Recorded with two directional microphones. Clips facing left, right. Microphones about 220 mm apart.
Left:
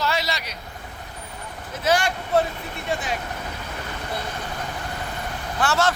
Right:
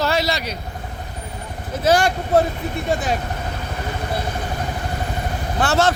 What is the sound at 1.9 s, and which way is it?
Speech, 35° right (ahead or behind).